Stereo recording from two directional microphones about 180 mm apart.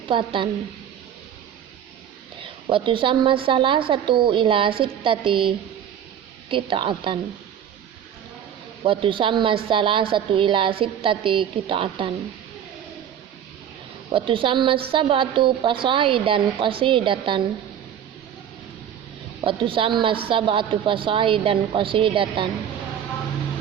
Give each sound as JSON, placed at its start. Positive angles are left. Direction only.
{"t": 0.1, "sound": "a woman's voice", "side_deg": -30}
{"t": 2.4, "sound": "a woman's voice", "side_deg": -30}
{"t": 8.8, "sound": "a woman's voice", "side_deg": -30}
{"t": 14.1, "sound": "a woman's voice", "side_deg": -30}
{"t": 19.5, "sound": "a woman's voice", "side_deg": -30}